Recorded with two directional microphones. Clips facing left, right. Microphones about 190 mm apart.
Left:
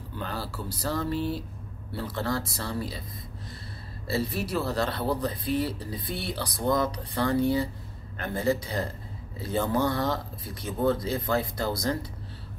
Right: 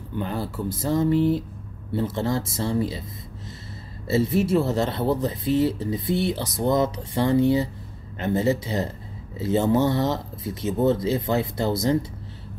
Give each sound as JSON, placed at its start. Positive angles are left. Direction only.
{"t": 0.1, "sound": "speech", "side_deg": -20}
{"t": 4.1, "sound": "speech", "side_deg": -20}